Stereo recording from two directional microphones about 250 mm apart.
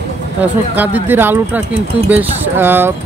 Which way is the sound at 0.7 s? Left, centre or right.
Centre.